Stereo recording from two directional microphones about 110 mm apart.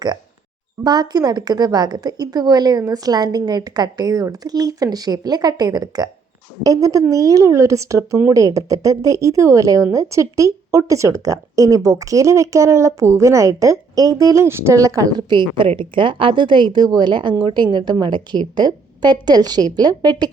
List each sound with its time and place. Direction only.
0.9 s a woman's voice: 35° right (ahead or behind)
15.4 s a woman's voice: 50° right (ahead or behind)